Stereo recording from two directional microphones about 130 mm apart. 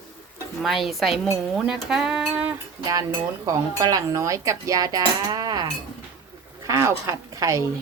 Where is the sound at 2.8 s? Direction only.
30° right (ahead or behind).